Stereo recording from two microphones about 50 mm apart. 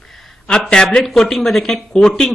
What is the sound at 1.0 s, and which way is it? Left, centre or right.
A man's voice, centre.